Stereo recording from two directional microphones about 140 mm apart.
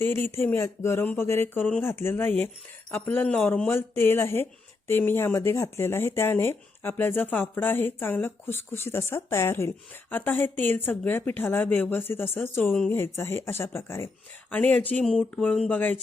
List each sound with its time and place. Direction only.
0.0 s speech: 15° left (ahead or behind)